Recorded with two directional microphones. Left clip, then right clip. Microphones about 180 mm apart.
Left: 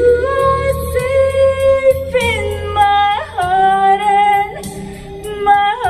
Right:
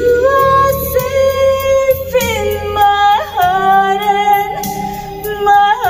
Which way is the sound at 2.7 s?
10° left (ahead or behind).